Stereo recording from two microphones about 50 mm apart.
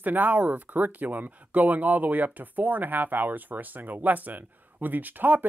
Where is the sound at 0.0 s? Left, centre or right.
Right.